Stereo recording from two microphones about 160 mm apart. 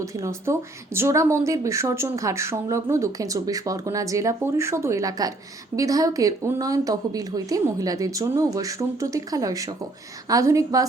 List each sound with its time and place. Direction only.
0.0 s speech: 20° right (ahead or behind)